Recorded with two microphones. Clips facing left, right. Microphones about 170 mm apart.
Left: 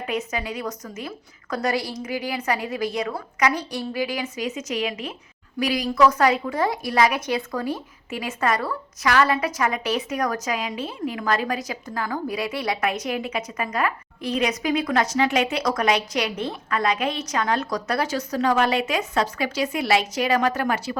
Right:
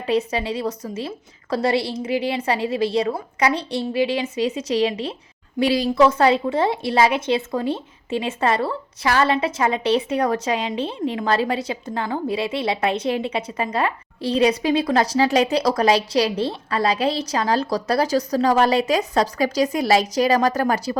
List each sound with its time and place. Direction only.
0.0 s a woman's voice: 30° right (ahead or behind)